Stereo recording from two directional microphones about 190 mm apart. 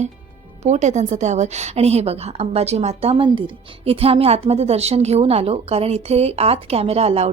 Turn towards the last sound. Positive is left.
turn(degrees=-30)  # may be behind; listen again after turning